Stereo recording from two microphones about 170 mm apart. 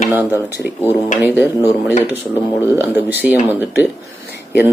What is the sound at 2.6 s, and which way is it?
Speech, 15° right (ahead or behind).